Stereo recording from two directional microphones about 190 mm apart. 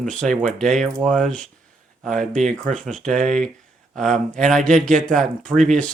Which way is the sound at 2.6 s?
Centre (ahead or behind).